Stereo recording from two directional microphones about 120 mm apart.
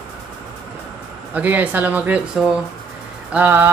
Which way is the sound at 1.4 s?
15° right (ahead or behind).